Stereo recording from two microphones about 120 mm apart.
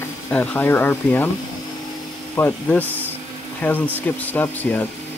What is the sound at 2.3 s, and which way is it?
Speech, 15° left (ahead or behind).